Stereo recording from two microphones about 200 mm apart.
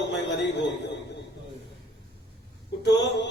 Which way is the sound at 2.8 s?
60° left (ahead or behind).